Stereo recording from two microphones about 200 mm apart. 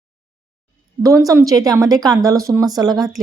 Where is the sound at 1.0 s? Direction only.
15° right (ahead or behind).